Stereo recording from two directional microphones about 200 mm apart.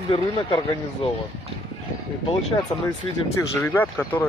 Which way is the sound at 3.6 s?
10° left (ahead or behind).